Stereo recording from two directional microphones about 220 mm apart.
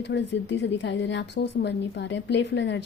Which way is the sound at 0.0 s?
50° left (ahead or behind).